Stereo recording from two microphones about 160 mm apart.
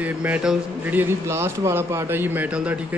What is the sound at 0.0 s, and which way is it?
A man's voice, 10° right (ahead or behind).